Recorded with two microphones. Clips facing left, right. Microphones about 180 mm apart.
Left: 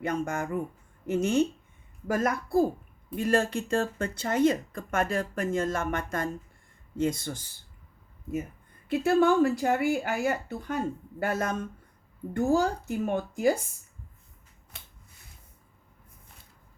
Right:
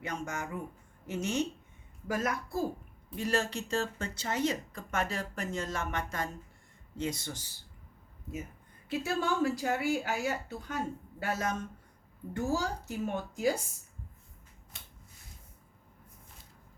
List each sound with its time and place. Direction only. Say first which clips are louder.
0.0 s speech: left 8 dB; 55° left (ahead or behind)
8.9 s speech: left 9 dB; 55° left (ahead or behind)
14.7 s finger snapping: left 3 dB; 65° left (ahead or behind)